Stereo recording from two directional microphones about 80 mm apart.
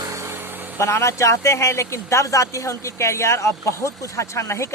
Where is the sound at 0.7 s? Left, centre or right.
Left.